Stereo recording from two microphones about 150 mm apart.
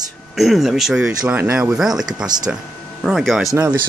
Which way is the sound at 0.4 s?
Centre (ahead or behind).